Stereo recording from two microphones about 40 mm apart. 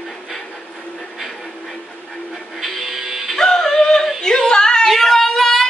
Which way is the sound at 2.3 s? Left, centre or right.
Centre.